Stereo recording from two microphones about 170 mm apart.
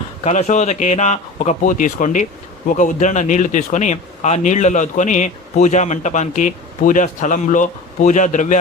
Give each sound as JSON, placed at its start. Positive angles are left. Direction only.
{"t": 0.3, "sound": "speech", "side_deg": 40}